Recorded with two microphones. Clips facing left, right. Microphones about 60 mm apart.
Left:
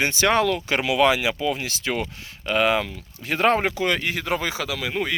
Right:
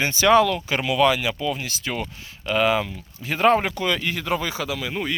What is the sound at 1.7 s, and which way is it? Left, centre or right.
Speech, left.